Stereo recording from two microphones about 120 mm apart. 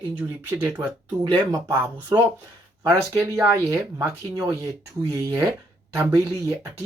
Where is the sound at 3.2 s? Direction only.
25° right (ahead or behind).